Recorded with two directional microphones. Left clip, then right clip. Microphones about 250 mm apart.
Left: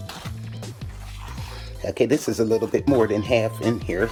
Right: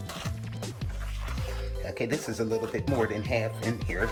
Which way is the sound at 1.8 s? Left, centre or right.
Left.